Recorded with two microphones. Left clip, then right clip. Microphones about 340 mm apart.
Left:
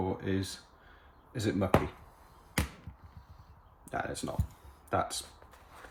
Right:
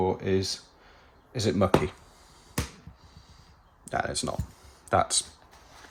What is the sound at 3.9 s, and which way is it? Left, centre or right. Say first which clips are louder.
Speech: right 6 dB; right.